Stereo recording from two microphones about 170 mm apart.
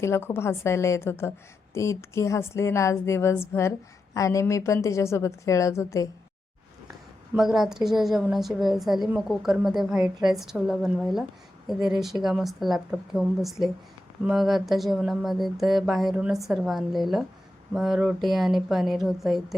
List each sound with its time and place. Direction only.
0.0 s a woman's voice: 15° left (ahead or behind)
7.3 s a woman's voice: centre (ahead or behind)